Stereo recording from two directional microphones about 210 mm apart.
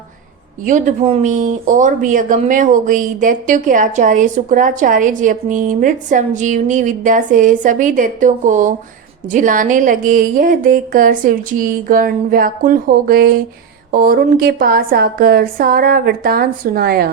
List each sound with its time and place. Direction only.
0.6 s a woman's voice: 35° right (ahead or behind)